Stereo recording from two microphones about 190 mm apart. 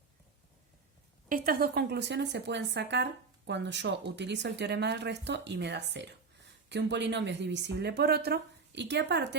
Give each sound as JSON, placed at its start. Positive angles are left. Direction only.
{"t": 1.3, "sound": "a woman's voice", "side_deg": -50}